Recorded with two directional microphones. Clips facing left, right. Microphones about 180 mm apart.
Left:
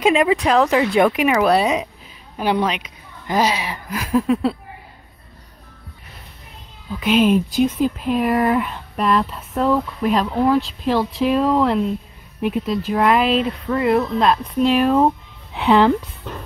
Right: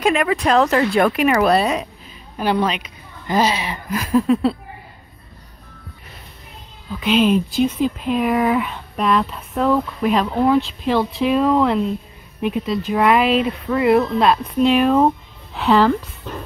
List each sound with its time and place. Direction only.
0.4 s speech: 10° left (ahead or behind)
7.1 s speech: 5° left (ahead or behind)
15.5 s speech: 15° left (ahead or behind)